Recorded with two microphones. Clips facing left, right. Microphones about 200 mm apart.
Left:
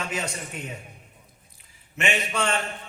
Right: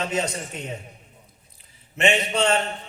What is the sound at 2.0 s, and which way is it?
Speech, 25° right (ahead or behind).